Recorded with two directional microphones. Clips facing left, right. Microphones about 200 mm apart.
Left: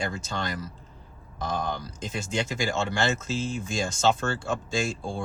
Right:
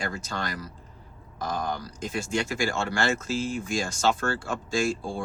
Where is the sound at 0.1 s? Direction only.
25° left (ahead or behind).